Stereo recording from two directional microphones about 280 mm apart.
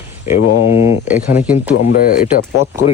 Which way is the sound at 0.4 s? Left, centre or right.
Left.